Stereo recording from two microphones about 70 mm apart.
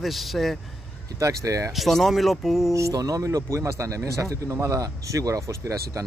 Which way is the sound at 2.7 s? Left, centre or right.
Right.